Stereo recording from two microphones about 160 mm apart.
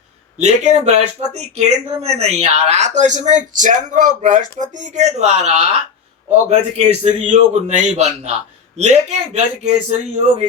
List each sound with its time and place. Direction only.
0.3 s speech: 45° right (ahead or behind)